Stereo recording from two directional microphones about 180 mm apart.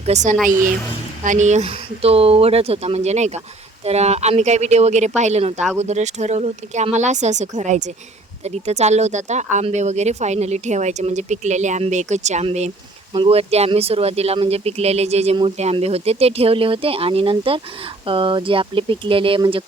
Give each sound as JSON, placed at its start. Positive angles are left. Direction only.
{"t": 0.0, "sound": "speech", "side_deg": -40}